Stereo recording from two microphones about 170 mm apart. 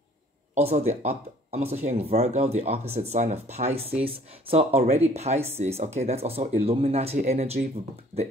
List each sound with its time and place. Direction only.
0.6 s speech: 40° right (ahead or behind)